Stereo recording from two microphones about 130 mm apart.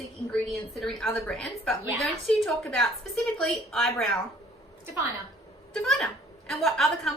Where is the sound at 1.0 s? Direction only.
5° left (ahead or behind).